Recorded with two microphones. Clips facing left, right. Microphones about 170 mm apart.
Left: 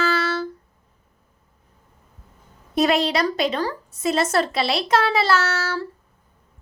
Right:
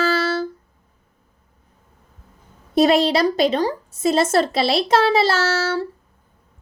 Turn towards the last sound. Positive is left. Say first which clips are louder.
# right 2 dB
turn(degrees=-25)  # may be behind; listen again after turning